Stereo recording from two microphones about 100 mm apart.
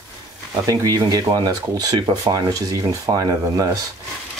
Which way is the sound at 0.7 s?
40° right (ahead or behind).